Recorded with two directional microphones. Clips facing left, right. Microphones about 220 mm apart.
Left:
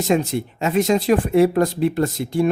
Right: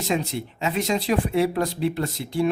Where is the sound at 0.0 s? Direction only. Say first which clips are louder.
Left 6 dB; 50° left (ahead or behind).